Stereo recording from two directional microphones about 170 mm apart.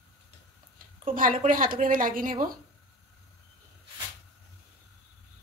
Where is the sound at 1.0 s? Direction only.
55° right (ahead or behind).